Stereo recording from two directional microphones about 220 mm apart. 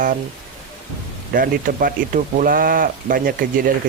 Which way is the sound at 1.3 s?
40° right (ahead or behind).